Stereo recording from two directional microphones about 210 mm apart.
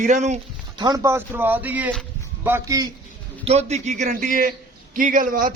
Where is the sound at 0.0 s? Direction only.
35° right (ahead or behind).